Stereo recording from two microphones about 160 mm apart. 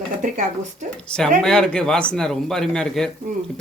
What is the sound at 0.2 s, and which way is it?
Speech, 55° right (ahead or behind).